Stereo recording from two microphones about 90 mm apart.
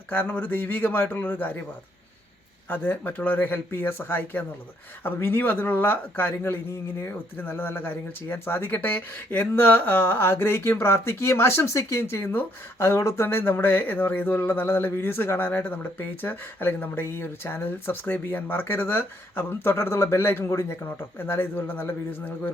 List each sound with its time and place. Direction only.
0.1 s speech: 20° left (ahead or behind)
2.6 s speech: 20° left (ahead or behind)